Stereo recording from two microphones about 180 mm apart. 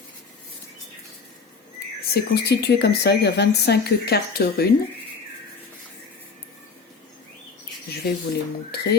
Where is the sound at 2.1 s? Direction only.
65° left (ahead or behind).